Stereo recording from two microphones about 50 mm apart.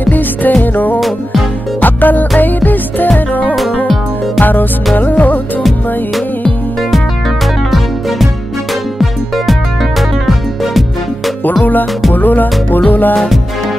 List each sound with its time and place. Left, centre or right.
0.0 s music: left
0.9 s music: centre
1.8 s music: left
9.5 s music: centre
11.4 s music: left
13.1 s music: centre